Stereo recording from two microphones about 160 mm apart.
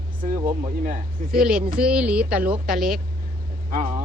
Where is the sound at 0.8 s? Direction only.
55° right (ahead or behind).